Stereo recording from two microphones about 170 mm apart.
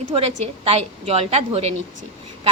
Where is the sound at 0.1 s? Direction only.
35° right (ahead or behind).